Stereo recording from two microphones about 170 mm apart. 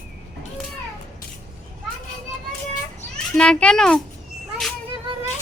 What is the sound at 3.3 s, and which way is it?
Speech, 5° left (ahead or behind).